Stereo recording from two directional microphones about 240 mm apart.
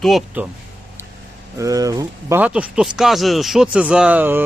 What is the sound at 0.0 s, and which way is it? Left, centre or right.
Speech, centre.